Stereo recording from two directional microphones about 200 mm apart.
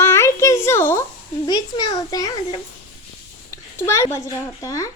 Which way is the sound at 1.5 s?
20° left (ahead or behind).